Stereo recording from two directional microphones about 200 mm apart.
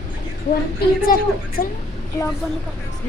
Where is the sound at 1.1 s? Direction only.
45° left (ahead or behind).